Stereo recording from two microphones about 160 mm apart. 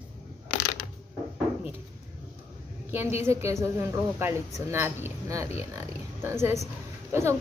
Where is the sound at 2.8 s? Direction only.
15° right (ahead or behind).